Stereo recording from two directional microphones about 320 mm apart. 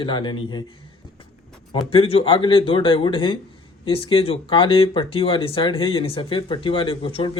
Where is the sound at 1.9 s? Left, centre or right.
Centre.